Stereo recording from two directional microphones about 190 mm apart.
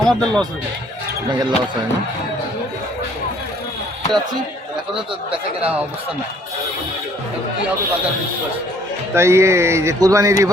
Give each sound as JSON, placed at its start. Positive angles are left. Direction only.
{"t": 0.0, "sound": "speech", "side_deg": 5}
{"t": 1.3, "sound": "speech", "side_deg": -25}
{"t": 9.1, "sound": "speech", "side_deg": -15}